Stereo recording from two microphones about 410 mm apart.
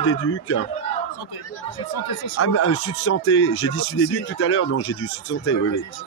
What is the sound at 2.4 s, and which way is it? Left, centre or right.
Speech, left.